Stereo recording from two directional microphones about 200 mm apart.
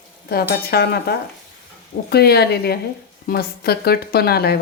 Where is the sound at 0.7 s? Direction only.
55° left (ahead or behind).